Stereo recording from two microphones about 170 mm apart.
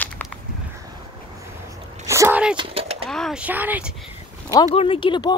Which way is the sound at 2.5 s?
30° right (ahead or behind).